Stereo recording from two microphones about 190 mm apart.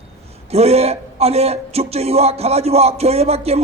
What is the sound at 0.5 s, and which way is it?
Speech, 35° right (ahead or behind).